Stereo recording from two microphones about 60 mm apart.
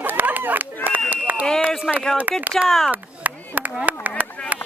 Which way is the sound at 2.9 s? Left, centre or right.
Right.